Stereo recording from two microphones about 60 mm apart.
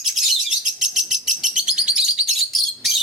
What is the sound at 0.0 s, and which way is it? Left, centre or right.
Bird, centre.